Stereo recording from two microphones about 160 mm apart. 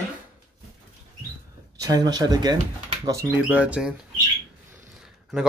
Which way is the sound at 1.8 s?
25° right (ahead or behind).